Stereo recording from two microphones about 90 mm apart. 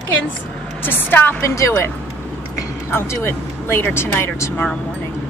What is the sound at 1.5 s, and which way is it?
Speech, 35° left (ahead or behind).